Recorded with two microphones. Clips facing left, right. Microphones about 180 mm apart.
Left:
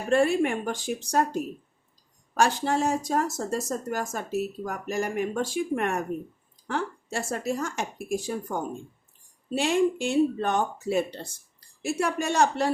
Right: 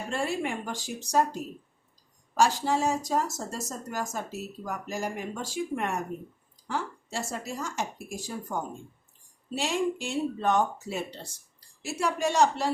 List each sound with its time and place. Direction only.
0.1 s speech: 60° left (ahead or behind)
9.6 s speech: 60° left (ahead or behind)